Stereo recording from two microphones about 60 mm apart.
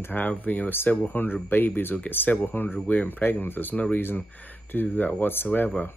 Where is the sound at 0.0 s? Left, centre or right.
Left.